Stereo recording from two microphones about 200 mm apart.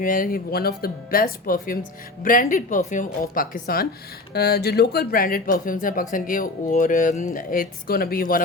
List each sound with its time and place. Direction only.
0.0 s speech: 45° left (ahead or behind)